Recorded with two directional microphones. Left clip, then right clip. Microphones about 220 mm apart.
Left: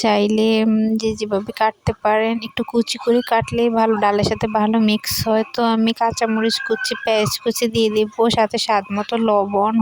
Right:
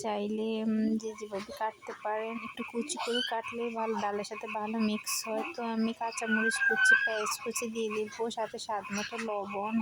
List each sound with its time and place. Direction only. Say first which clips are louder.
0.0 s speech: left 17 dB; 40° left (ahead or behind)